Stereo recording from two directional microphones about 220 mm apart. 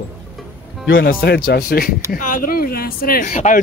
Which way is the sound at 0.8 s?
45° left (ahead or behind).